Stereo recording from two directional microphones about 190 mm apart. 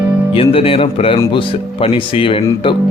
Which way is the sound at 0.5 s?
30° left (ahead or behind).